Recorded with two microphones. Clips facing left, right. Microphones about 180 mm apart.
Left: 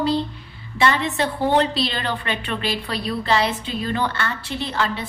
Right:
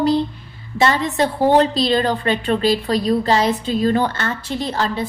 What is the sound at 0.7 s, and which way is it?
A woman's voice, 40° right (ahead or behind).